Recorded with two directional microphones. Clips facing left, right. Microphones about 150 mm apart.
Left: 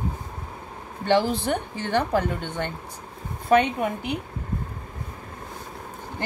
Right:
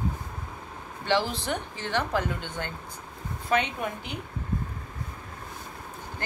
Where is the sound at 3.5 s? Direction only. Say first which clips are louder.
Left 7 dB; 55° left (ahead or behind).